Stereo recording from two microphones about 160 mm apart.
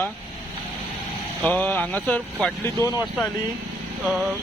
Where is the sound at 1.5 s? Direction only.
10° left (ahead or behind).